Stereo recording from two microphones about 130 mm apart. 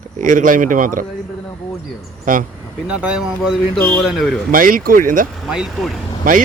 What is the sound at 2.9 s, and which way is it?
Speech, 10° right (ahead or behind).